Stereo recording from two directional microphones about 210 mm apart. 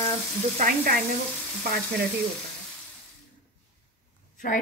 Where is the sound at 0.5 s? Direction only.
40° right (ahead or behind).